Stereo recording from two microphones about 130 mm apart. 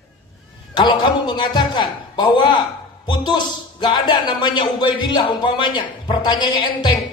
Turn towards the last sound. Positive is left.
turn(degrees=35)  # may be behind; listen again after turning